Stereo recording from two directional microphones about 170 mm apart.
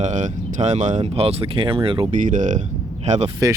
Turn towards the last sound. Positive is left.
turn(degrees=-40)  # may be behind; listen again after turning